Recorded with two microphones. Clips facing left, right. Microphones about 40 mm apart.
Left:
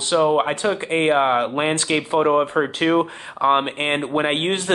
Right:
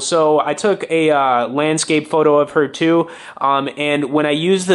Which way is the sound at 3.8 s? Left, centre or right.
Right.